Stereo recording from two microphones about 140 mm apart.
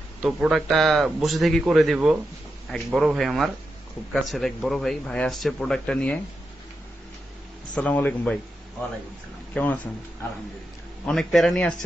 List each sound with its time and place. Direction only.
0.2 s speech: centre (ahead or behind)
7.7 s a man's voice: 10° left (ahead or behind)
9.5 s speech: 10° left (ahead or behind)
11.1 s speech: centre (ahead or behind)